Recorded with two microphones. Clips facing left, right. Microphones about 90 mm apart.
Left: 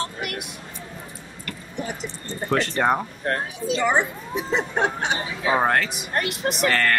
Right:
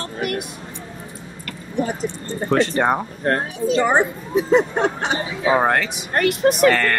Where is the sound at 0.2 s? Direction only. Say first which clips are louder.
Right 7 dB; 40° right (ahead or behind).